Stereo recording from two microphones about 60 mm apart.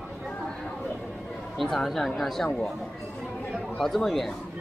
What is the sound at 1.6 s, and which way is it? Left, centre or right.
Speech, centre.